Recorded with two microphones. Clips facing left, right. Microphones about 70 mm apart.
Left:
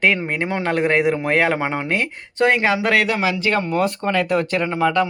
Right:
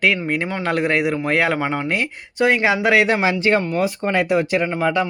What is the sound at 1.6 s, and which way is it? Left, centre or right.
Speech, centre.